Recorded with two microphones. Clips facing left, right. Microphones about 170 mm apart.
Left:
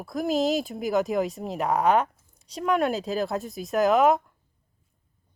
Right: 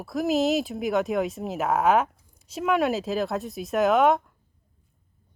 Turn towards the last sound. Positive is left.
turn(degrees=0)  # may be behind; listen again after turning